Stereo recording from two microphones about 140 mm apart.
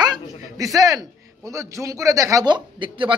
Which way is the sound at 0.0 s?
30° right (ahead or behind).